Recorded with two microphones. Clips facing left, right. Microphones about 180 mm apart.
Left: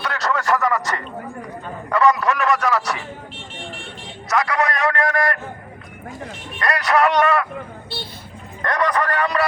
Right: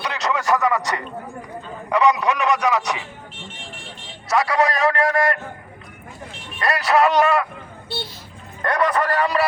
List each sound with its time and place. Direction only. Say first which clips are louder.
0.0 s a sound: left 1 dB; 20° right (ahead or behind)
1.9 s a man's voice: even; 20° right (ahead or behind)
4.3 s a man's voice: right 2 dB; 30° right (ahead or behind)
6.6 s a man's voice: right 1 dB; 30° right (ahead or behind)
8.6 s speech: right 1 dB; 10° right (ahead or behind)
9.1 s a sound: right 1 dB; 30° right (ahead or behind)